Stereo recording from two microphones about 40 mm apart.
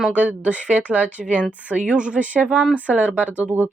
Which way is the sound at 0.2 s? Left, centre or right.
Right.